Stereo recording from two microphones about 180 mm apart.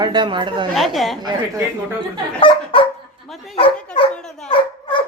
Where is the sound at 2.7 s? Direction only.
30° left (ahead or behind).